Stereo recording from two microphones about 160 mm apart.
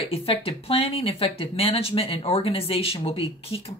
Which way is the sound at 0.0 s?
35° left (ahead or behind).